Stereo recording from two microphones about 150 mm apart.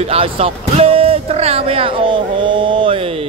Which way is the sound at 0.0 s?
40° right (ahead or behind).